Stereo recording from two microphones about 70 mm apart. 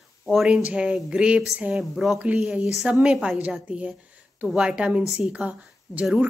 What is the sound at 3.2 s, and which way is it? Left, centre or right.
A woman's voice, centre.